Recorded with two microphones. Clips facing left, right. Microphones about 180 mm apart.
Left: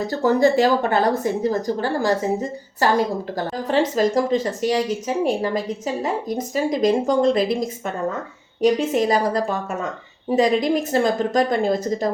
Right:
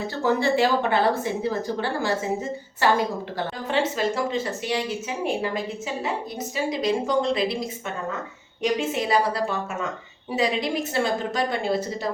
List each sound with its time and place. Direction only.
0.0 s speech: 40° left (ahead or behind)
8.9 s a woman's voice: 45° left (ahead or behind)